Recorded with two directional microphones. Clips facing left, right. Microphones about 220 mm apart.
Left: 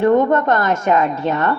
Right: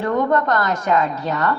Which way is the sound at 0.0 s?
25° left (ahead or behind).